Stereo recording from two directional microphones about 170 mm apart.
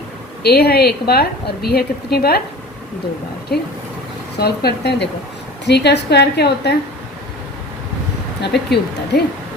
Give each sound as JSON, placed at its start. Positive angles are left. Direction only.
{"t": 0.4, "sound": "a woman's voice", "side_deg": 70}
{"t": 3.5, "sound": "a woman's voice", "side_deg": 65}
{"t": 8.4, "sound": "a woman's voice", "side_deg": 75}